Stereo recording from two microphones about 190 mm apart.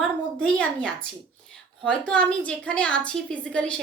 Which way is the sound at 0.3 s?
5° left (ahead or behind).